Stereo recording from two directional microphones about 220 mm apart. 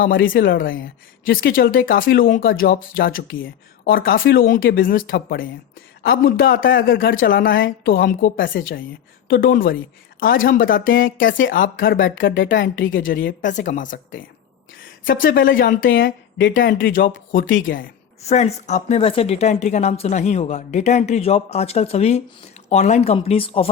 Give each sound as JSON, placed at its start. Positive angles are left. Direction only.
{"t": 0.2, "sound": "speech", "side_deg": 50}
{"t": 0.7, "sound": "speech", "side_deg": 60}
{"t": 1.5, "sound": "a woman's voice", "side_deg": 40}
{"t": 12.2, "sound": "speech", "side_deg": 60}
{"t": 12.5, "sound": "a woman's voice", "side_deg": 40}
{"t": 16.9, "sound": "a woman's voice", "side_deg": 40}